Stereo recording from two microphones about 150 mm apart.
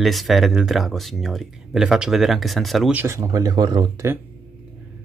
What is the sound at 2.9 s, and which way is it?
Speech, 15° right (ahead or behind).